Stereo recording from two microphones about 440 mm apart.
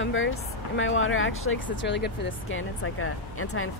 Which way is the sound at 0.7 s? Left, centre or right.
Left.